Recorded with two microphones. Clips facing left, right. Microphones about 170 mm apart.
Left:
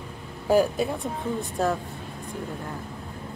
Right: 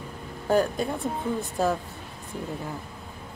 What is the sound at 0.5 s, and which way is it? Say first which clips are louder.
Speech: left 2 dB; 5° left (ahead or behind).